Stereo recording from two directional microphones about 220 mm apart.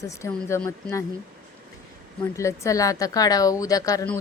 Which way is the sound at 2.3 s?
15° left (ahead or behind).